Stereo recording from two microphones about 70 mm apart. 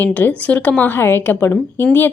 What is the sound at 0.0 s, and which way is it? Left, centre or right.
Speech, left.